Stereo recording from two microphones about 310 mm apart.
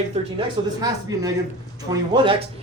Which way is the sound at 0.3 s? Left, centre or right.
Centre.